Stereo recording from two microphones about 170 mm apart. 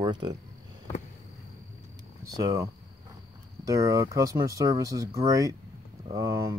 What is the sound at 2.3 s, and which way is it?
Speech, 20° right (ahead or behind).